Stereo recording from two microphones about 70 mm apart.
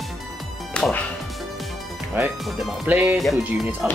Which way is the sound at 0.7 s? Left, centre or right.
Centre.